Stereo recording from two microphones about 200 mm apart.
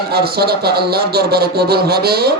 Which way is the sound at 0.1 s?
50° right (ahead or behind).